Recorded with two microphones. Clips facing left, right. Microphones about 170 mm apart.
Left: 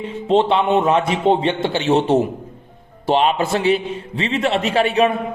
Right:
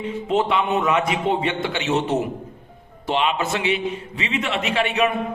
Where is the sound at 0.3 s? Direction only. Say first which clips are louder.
Left 6 dB; 30° left (ahead or behind).